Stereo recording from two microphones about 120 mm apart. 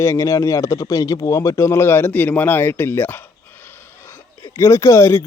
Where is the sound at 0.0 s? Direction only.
25° left (ahead or behind).